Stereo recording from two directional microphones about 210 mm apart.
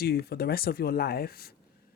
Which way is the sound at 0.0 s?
50° left (ahead or behind).